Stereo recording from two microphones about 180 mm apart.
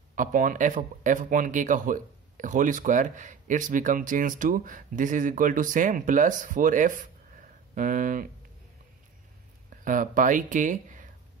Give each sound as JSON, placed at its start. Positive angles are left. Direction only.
{"t": 0.1, "sound": "speech", "side_deg": -45}
{"t": 9.8, "sound": "speech", "side_deg": -45}